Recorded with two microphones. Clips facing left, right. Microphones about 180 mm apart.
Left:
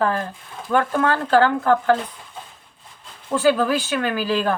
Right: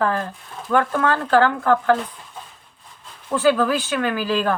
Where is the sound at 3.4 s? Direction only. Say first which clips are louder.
Even; 30° left (ahead or behind).